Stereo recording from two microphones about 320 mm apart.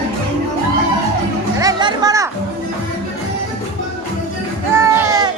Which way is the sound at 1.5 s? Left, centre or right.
Centre.